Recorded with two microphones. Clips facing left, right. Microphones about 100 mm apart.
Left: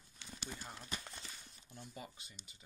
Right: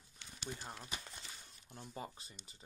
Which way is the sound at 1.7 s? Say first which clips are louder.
Right 3 dB; 35° right (ahead or behind).